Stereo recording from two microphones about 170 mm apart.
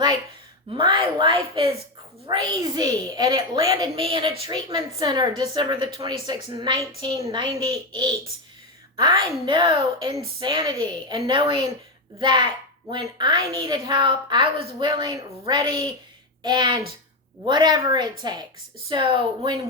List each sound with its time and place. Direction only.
0.7 s a woman's voice: 30° right (ahead or behind)